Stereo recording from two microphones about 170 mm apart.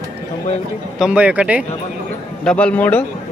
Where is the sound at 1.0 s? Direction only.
5° right (ahead or behind).